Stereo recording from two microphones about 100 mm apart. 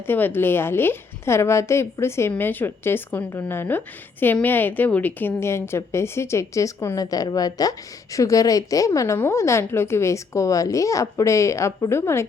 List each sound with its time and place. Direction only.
0.1 s a woman's voice: 20° left (ahead or behind)